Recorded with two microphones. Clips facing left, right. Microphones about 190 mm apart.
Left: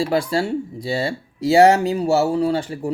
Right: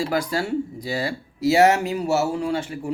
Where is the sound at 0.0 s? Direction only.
25° left (ahead or behind).